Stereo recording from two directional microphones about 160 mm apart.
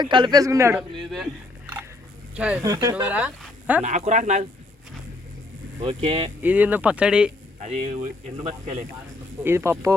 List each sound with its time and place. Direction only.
0.0 s a man's voice: 30° right (ahead or behind)
2.3 s speech: 5° right (ahead or behind)
2.6 s a man's voice: 20° right (ahead or behind)
2.9 s speech: 10° right (ahead or behind)
3.8 s speech: 45° right (ahead or behind)
5.8 s speech: 35° right (ahead or behind)
6.4 s speech: 10° right (ahead or behind)
7.6 s speech: 45° right (ahead or behind)
9.4 s speech: 15° right (ahead or behind)